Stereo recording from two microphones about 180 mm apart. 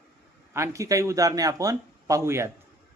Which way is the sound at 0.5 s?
15° right (ahead or behind).